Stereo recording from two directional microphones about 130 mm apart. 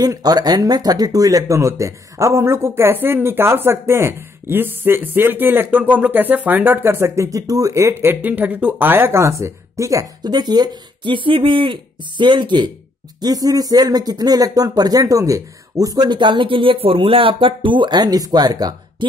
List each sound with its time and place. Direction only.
0.0 s speech: 30° right (ahead or behind)